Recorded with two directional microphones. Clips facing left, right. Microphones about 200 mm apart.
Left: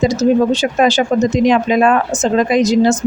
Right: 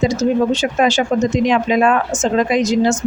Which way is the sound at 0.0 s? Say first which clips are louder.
Left 3 dB; 35° left (ahead or behind).